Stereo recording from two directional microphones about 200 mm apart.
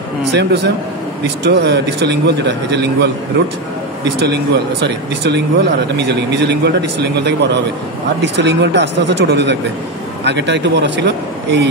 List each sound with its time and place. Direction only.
0.3 s speech: 60° right (ahead or behind)
4.2 s speech: 60° right (ahead or behind)